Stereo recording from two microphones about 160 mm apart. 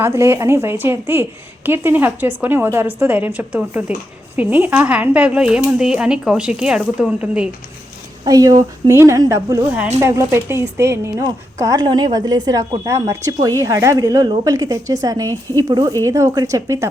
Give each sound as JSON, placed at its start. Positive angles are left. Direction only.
{"t": 0.0, "sound": "a woman's voice", "side_deg": -15}
{"t": 8.2, "sound": "speech", "side_deg": -25}